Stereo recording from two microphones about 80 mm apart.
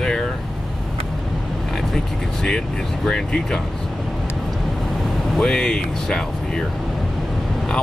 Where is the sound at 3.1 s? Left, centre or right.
Centre.